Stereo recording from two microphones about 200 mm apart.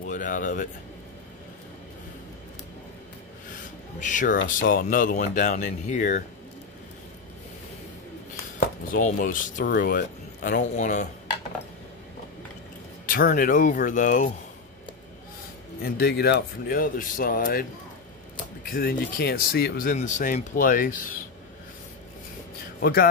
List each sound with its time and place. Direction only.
0.0 s a sound: 40° left (ahead or behind)
4.0 s speech: 40° left (ahead or behind)
8.5 s chopping: 40° left (ahead or behind)
9.7 s speech: 50° left (ahead or behind)
13.0 s speech: 45° left (ahead or behind)
15.8 s speech: 50° left (ahead or behind)
18.7 s speech: 45° left (ahead or behind)
22.8 s a man's voice: 50° left (ahead or behind)